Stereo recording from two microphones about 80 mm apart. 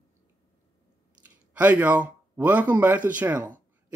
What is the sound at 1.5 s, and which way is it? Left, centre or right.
Speech, centre.